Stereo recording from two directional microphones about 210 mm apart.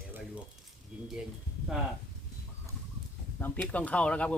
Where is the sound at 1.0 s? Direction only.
Centre (ahead or behind).